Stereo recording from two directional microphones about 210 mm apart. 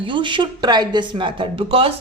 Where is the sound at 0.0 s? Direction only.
25° right (ahead or behind).